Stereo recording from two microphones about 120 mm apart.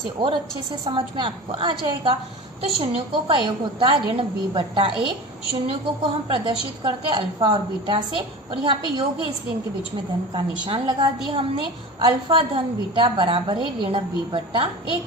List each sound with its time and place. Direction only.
0.2 s a woman's voice: 40° right (ahead or behind)
10.3 s a woman's voice: 40° right (ahead or behind)